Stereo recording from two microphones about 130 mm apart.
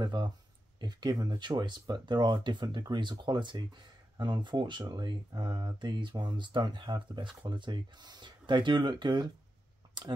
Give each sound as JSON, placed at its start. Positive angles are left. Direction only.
{"t": 0.0, "sound": "speech", "side_deg": -35}
{"t": 10.0, "sound": "clicking", "side_deg": -35}